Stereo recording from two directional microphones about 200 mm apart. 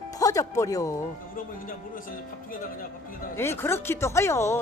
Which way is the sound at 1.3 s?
45° left (ahead or behind).